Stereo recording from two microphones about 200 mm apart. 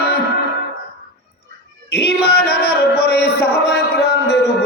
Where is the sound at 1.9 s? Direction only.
55° left (ahead or behind).